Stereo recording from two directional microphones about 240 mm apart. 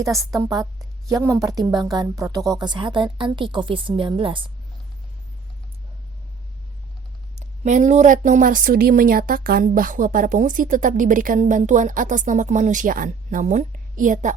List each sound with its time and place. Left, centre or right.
0.0 s a woman's voice: centre
7.3 s a woman's voice: right